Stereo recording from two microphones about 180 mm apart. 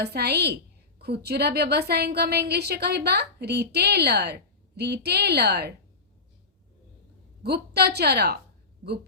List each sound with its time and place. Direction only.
0.0 s a woman's voice: 65° right (ahead or behind)
7.4 s a woman's voice: 65° right (ahead or behind)